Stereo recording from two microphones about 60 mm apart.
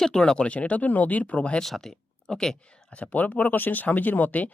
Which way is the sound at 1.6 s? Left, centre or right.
Centre.